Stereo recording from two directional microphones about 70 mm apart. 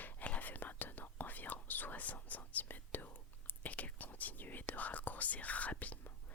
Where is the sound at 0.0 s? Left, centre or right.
Left.